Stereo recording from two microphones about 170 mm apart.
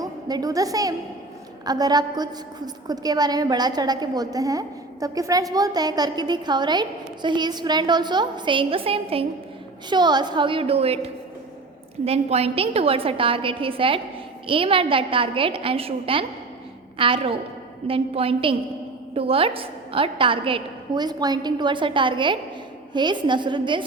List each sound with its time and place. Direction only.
0.0 s a woman's voice: 20° right (ahead or behind)